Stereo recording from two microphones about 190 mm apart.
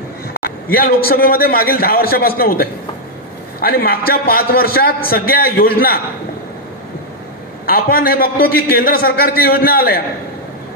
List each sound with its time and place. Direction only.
0.3 s a man's voice: 50° left (ahead or behind)
7.7 s a man's voice: 50° left (ahead or behind)